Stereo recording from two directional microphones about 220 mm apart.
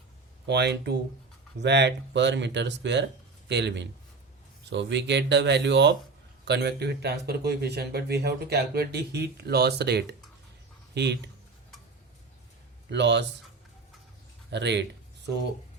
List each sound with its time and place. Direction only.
0.4 s speech: 50° right (ahead or behind)
12.9 s speech: 50° right (ahead or behind)
14.5 s speech: 50° right (ahead or behind)